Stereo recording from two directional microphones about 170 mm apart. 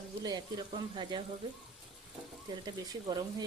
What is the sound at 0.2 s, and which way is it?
Speech, 25° right (ahead or behind).